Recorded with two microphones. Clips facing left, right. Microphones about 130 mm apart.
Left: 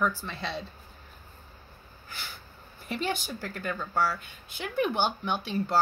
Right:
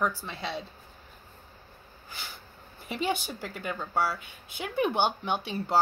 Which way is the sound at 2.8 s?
15° right (ahead or behind).